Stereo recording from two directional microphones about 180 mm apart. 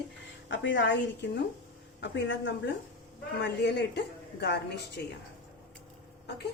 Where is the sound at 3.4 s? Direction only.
75° left (ahead or behind).